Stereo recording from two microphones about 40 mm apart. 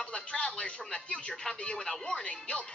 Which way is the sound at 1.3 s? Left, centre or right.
Centre.